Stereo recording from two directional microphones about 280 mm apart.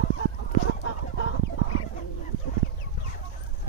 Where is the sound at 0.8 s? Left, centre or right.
Left.